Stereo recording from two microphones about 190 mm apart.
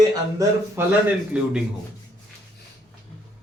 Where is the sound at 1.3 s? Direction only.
5° right (ahead or behind).